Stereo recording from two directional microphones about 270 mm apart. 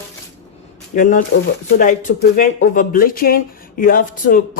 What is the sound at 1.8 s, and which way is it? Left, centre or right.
Speech, left.